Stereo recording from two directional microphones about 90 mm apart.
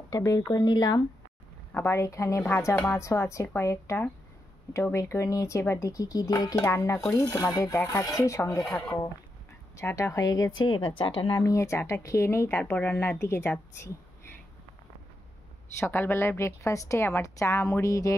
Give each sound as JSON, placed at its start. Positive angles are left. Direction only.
{"t": 0.1, "sound": "a woman's voice", "side_deg": 35}
{"t": 0.6, "sound": "speech", "side_deg": 50}
{"t": 1.7, "sound": "a woman's voice", "side_deg": 25}
{"t": 6.6, "sound": "a woman's voice", "side_deg": 30}
{"t": 9.8, "sound": "a woman's voice", "side_deg": 30}
{"t": 10.7, "sound": "a woman's voice", "side_deg": 70}
{"t": 11.3, "sound": "speech", "side_deg": 35}
{"t": 15.8, "sound": "a woman's voice", "side_deg": 25}